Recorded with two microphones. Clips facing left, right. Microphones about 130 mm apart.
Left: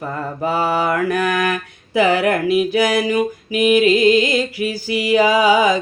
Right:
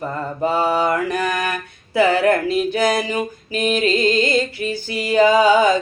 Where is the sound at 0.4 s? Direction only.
5° left (ahead or behind).